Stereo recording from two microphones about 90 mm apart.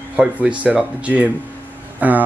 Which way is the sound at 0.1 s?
15° right (ahead or behind).